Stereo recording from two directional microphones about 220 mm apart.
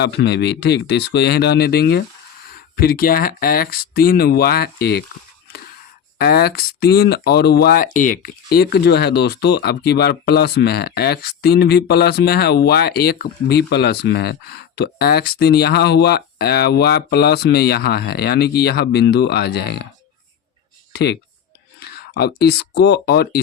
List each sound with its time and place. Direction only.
0.0 s speech: 50° left (ahead or behind)
6.1 s speech: 45° left (ahead or behind)
20.9 s speech: 50° left (ahead or behind)